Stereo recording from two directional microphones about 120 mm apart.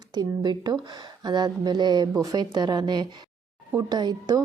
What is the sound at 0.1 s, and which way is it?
A woman's voice, 35° right (ahead or behind).